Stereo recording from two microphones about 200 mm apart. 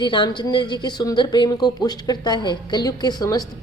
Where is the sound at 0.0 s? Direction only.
25° left (ahead or behind).